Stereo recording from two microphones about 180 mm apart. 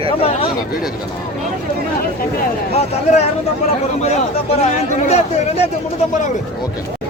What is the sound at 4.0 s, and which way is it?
Speech, 35° left (ahead or behind).